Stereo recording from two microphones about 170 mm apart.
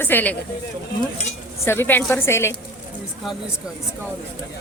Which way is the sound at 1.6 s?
15° left (ahead or behind).